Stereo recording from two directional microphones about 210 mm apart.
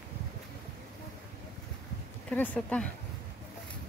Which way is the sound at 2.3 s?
10° left (ahead or behind).